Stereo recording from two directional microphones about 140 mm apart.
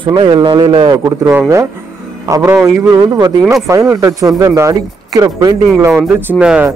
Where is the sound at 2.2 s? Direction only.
20° right (ahead or behind).